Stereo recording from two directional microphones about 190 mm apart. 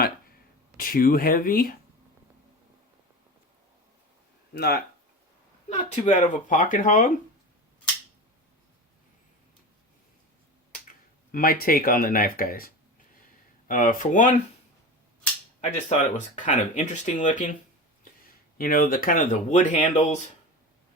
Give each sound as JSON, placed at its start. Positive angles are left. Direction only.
{"t": 0.8, "sound": "speech", "side_deg": 50}
{"t": 4.5, "sound": "speech", "side_deg": 60}
{"t": 5.6, "sound": "speech", "side_deg": 40}
{"t": 11.3, "sound": "speech", "side_deg": 50}
{"t": 15.9, "sound": "speech", "side_deg": 40}